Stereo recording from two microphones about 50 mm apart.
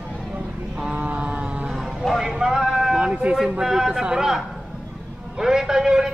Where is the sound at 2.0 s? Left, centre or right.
Centre.